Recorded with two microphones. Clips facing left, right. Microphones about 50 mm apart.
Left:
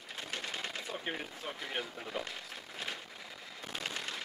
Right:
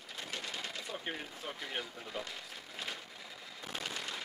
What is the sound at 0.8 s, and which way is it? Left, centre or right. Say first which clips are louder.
Speech: left 2 dB; centre.